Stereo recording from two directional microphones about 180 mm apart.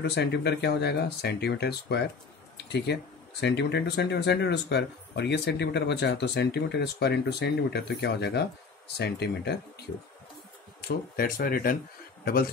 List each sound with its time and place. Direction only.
0.0 s speech: 70° left (ahead or behind)
10.8 s speech: 55° left (ahead or behind)